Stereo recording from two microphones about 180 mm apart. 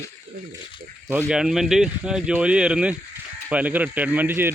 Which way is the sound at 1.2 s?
5° right (ahead or behind).